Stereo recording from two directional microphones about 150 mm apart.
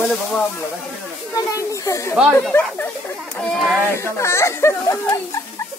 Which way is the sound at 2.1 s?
5° right (ahead or behind).